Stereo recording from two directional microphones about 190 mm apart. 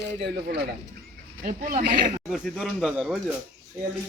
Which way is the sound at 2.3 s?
Centre (ahead or behind).